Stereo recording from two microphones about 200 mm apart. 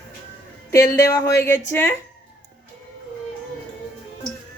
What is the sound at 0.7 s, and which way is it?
Speech, 15° left (ahead or behind).